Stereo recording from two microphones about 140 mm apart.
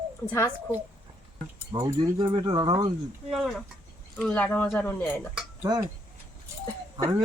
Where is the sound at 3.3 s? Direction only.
Centre (ahead or behind).